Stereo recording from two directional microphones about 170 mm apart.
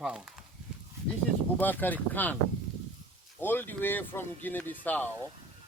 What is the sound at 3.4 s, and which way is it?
Speech, 10° left (ahead or behind).